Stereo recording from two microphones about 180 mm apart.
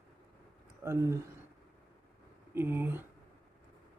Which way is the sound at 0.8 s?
15° right (ahead or behind).